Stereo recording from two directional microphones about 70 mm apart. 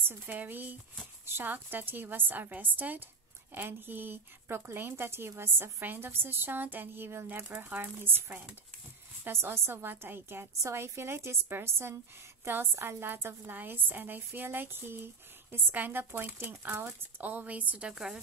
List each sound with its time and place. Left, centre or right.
0.0 s speech: right
9.2 s speech: right; by 18.2 s centre